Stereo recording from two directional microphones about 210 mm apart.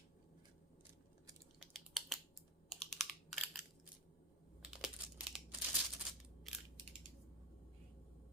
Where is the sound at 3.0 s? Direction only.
Centre (ahead or behind).